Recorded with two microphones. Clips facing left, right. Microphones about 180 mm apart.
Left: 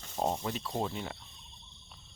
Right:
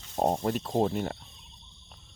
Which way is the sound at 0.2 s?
50° right (ahead or behind).